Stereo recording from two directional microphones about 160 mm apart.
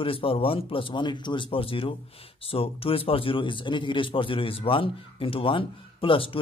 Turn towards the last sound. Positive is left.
turn(degrees=35)  # may be behind; listen again after turning